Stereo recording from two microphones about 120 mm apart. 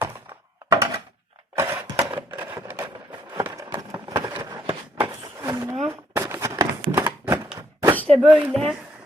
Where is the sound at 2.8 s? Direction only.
35° right (ahead or behind).